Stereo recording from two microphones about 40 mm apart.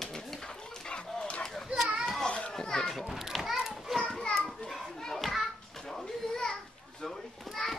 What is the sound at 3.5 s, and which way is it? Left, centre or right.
Children playing, centre.